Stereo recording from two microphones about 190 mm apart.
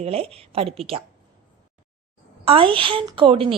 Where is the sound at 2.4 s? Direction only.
30° right (ahead or behind).